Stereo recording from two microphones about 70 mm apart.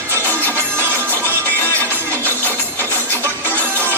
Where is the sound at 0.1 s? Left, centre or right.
Right.